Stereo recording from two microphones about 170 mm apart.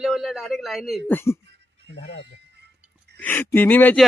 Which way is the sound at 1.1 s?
10° left (ahead or behind).